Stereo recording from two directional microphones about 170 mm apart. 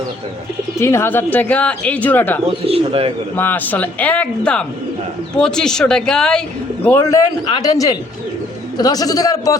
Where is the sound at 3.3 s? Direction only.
10° left (ahead or behind).